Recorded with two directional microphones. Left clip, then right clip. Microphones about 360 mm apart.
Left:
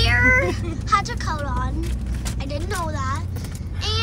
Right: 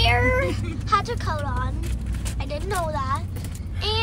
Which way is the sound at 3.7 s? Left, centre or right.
Centre.